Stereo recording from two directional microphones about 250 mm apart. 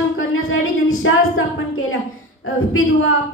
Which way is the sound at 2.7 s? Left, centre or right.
Left.